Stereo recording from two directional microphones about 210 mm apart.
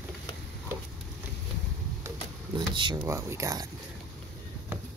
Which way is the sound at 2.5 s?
25° right (ahead or behind).